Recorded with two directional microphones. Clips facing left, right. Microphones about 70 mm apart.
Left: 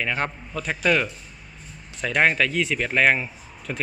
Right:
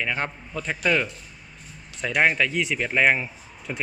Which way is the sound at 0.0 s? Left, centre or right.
Centre.